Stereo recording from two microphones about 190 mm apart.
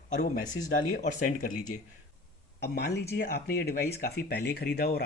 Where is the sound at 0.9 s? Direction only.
45° left (ahead or behind).